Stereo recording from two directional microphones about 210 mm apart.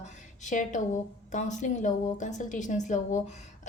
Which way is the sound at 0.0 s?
35° left (ahead or behind).